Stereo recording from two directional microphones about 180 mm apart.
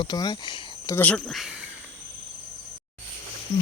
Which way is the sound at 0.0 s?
25° left (ahead or behind).